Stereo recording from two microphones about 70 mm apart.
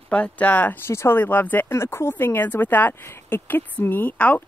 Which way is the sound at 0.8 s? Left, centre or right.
Left.